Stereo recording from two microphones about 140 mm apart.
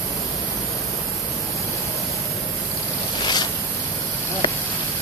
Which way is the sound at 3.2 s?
30° left (ahead or behind).